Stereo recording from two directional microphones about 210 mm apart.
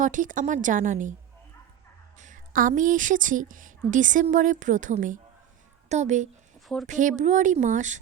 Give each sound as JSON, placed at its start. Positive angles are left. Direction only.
{"t": 0.0, "sound": "a woman's voice", "side_deg": -40}
{"t": 2.1, "sound": "a woman's voice", "side_deg": -35}